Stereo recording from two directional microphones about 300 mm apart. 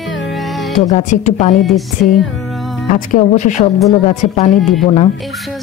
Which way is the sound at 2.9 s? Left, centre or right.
Left.